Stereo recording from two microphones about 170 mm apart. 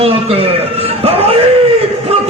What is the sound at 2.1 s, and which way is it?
Music, 35° right (ahead or behind).